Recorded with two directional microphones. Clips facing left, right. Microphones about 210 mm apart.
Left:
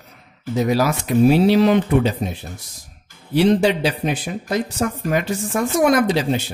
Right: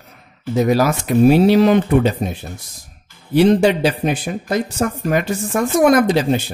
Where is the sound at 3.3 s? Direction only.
50° right (ahead or behind).